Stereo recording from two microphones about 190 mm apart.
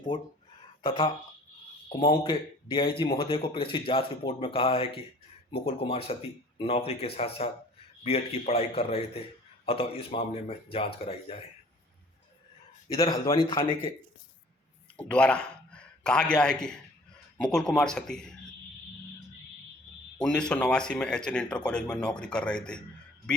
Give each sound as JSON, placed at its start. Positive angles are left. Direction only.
{"t": 0.1, "sound": "a man's voice", "side_deg": 25}
{"t": 13.0, "sound": "speech", "side_deg": 20}
{"t": 14.9, "sound": "a man's voice", "side_deg": 5}
{"t": 20.2, "sound": "speech", "side_deg": 5}